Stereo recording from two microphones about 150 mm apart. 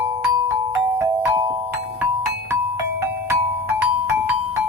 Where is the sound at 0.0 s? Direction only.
20° right (ahead or behind).